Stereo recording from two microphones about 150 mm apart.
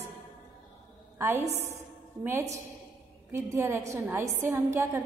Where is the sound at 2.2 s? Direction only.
15° right (ahead or behind).